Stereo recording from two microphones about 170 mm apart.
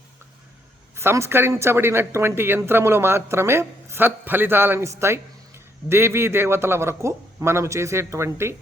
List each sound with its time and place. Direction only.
0.9 s a man's voice: 15° right (ahead or behind)